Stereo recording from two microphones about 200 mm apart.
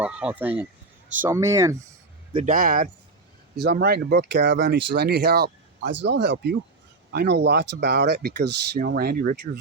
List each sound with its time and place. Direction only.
0.0 s speech: 5° right (ahead or behind)
2.3 s speech: 40° right (ahead or behind)